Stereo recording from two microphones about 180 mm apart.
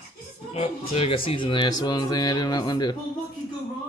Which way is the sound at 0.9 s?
30° left (ahead or behind).